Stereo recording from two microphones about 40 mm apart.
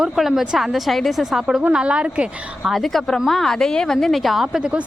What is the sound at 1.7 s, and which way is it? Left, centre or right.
Speech, right.